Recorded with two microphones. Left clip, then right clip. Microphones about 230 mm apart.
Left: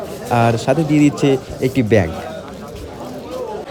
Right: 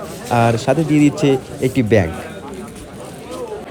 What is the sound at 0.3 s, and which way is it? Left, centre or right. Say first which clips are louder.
Speech: even; centre.